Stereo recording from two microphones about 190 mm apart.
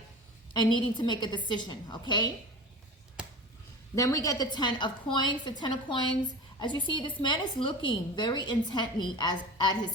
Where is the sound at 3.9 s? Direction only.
20° left (ahead or behind).